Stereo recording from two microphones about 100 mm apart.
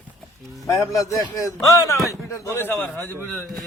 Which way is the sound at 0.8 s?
30° left (ahead or behind).